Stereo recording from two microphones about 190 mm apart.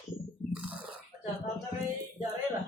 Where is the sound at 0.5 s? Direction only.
5° right (ahead or behind).